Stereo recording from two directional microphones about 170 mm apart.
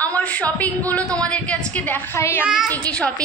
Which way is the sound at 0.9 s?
5° left (ahead or behind).